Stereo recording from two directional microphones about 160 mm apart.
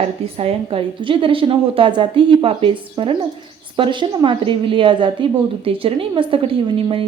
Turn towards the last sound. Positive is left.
turn(degrees=-35)  # may be behind; listen again after turning